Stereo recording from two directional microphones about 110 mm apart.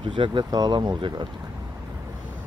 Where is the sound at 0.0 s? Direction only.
45° right (ahead or behind).